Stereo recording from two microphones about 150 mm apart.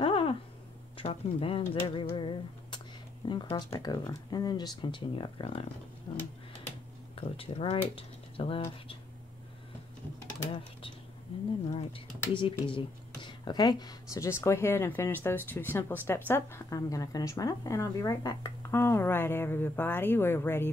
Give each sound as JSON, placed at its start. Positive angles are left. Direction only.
{"t": 0.0, "sound": "a sound", "side_deg": 35}
{"t": 0.9, "sound": "speech", "side_deg": 40}
{"t": 12.4, "sound": "a woman's voice", "side_deg": 35}